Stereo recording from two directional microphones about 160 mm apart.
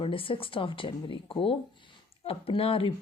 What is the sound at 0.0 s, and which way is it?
Speech, 35° left (ahead or behind).